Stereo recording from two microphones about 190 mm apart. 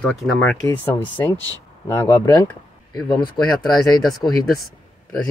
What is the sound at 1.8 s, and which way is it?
Speech, 15° left (ahead or behind).